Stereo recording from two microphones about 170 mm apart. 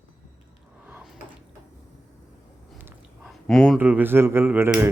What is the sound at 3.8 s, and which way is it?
Speech, 10° right (ahead or behind).